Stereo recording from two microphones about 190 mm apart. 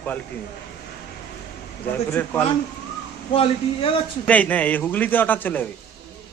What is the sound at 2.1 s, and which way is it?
Speech, 10° left (ahead or behind).